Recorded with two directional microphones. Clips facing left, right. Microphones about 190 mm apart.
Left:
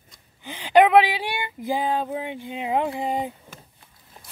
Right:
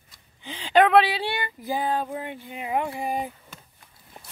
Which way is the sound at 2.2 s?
20° left (ahead or behind).